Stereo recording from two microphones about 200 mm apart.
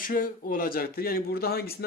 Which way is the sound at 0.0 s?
45° left (ahead or behind).